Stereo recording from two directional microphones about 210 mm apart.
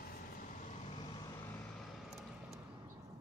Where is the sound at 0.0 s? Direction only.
45° left (ahead or behind).